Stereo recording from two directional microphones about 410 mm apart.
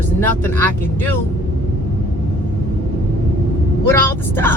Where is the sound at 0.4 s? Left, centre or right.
Centre.